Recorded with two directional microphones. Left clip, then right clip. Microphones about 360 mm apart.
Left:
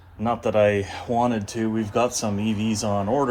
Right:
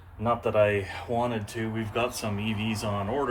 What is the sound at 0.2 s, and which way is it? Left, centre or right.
Speech, left.